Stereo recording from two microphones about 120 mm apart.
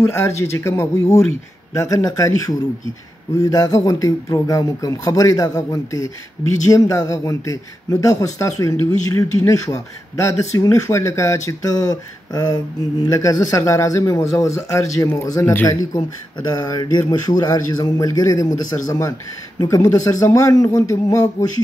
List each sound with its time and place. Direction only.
0.1 s a man's voice: 25° left (ahead or behind)